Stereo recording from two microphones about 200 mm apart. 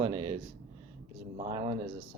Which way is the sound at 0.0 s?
25° right (ahead or behind).